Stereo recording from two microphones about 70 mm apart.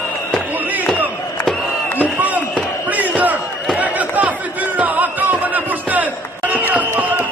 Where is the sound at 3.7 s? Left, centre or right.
Right.